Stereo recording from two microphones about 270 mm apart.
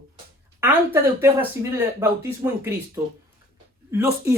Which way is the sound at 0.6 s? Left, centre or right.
Centre.